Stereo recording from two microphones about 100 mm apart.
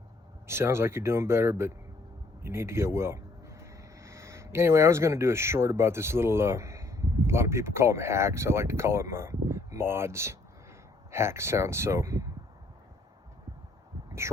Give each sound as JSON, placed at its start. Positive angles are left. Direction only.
{"t": 0.4, "sound": "speech", "side_deg": -25}